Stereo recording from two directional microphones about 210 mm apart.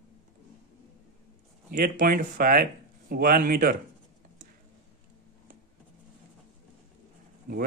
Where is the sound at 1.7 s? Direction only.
45° right (ahead or behind).